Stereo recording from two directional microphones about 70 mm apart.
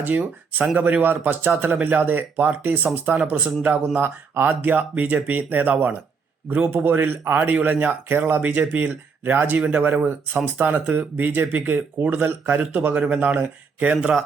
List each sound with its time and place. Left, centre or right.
0.0 s speech: right